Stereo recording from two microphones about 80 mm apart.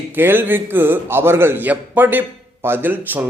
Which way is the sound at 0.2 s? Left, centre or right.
Right.